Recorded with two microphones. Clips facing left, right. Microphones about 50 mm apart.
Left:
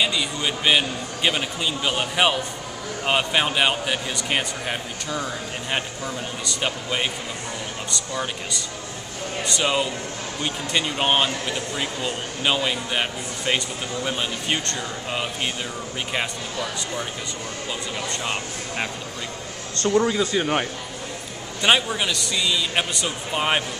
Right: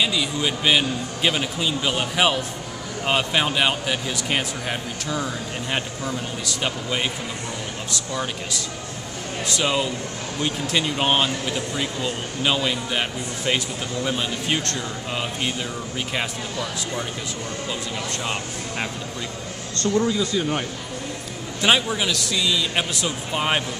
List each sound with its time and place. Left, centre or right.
0.0 s speech: centre
17.6 s speech: centre
20.3 s speech: left
21.5 s speech: centre